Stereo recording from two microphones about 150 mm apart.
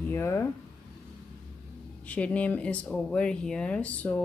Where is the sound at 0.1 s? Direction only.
15° left (ahead or behind).